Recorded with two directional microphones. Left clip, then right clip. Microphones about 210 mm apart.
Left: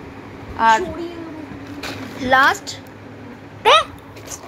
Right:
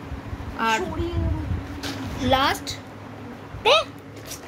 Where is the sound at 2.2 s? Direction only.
5° left (ahead or behind).